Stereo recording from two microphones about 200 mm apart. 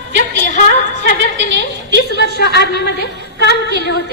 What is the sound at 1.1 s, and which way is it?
Speech, 60° right (ahead or behind).